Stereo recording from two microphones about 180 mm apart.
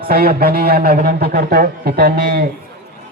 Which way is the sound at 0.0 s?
55° right (ahead or behind).